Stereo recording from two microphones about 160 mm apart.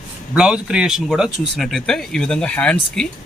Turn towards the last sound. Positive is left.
turn(degrees=5)  # may be behind; listen again after turning